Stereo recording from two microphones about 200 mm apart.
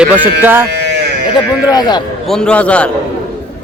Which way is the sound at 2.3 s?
5° left (ahead or behind).